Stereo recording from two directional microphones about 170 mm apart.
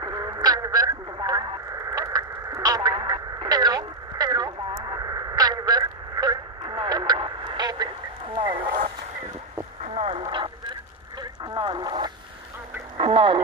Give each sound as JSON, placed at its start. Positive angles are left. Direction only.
{"t": 0.0, "sound": "radio", "side_deg": -25}
{"t": 9.9, "sound": "radio", "side_deg": -35}
{"t": 12.9, "sound": "a sound", "side_deg": -30}